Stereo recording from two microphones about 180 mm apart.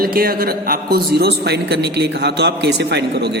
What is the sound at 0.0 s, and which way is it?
A man's voice, 55° right (ahead or behind).